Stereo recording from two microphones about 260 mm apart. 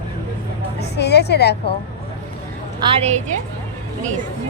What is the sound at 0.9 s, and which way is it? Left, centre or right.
Speech, left.